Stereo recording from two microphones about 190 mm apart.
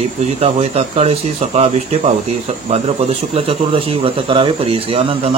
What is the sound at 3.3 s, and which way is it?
Speech, 30° right (ahead or behind).